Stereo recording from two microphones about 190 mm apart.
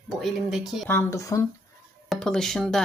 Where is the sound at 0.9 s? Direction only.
15° left (ahead or behind).